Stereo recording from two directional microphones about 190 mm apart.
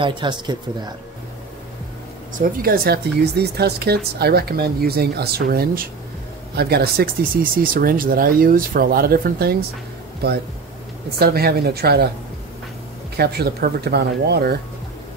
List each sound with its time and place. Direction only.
0.0 s speech: 25° right (ahead or behind)
2.3 s speech: 50° right (ahead or behind)
11.1 s speech: 55° right (ahead or behind)
13.1 s speech: 55° right (ahead or behind)